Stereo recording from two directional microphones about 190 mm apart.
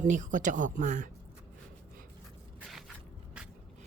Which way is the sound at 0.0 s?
40° right (ahead or behind).